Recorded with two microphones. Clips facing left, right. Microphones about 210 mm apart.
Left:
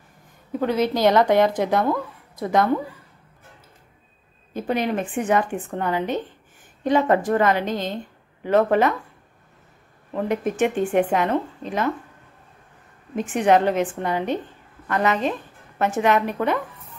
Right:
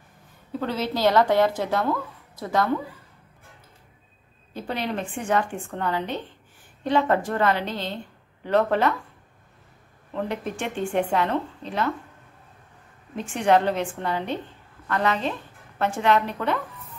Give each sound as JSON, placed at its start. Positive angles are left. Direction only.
{"t": 0.5, "sound": "a woman's voice", "side_deg": 15}
{"t": 4.6, "sound": "a woman's voice", "side_deg": 15}
{"t": 10.1, "sound": "a woman's voice", "side_deg": 15}
{"t": 13.1, "sound": "a woman's voice", "side_deg": 15}